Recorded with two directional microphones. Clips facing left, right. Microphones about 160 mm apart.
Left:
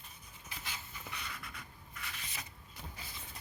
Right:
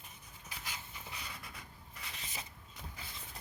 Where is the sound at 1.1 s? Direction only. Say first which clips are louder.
Left 2 dB; 25° right (ahead or behind).